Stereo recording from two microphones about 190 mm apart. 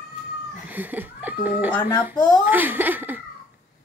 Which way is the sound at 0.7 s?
10° right (ahead or behind).